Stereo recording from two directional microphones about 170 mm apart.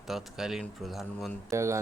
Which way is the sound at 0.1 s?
Centre (ahead or behind).